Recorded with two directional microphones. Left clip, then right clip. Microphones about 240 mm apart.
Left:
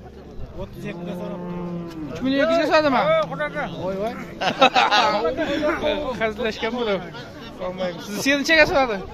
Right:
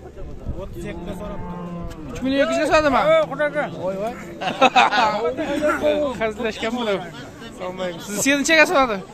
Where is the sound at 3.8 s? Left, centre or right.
Centre.